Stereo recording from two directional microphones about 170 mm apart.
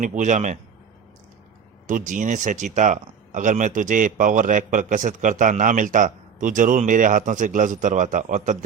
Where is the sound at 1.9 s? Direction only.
50° right (ahead or behind).